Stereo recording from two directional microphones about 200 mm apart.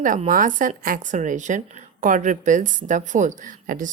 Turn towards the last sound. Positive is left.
turn(degrees=-40)  # may be behind; listen again after turning